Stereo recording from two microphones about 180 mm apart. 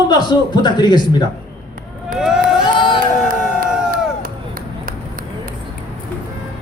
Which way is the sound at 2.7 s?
30° left (ahead or behind).